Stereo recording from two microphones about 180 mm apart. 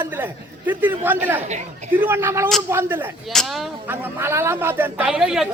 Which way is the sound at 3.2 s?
Centre (ahead or behind).